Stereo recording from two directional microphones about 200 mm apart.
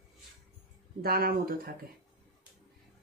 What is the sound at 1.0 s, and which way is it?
Speech, 50° right (ahead or behind).